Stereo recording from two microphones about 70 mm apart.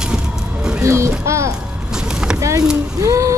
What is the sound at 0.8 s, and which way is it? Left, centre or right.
Speech, right.